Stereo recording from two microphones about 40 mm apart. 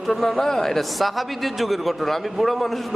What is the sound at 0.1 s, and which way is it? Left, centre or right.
A man's voice, centre.